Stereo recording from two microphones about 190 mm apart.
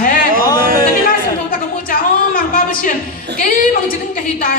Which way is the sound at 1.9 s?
50° left (ahead or behind).